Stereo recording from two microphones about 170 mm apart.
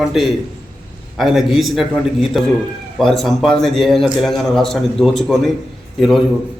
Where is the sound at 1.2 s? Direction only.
Centre (ahead or behind).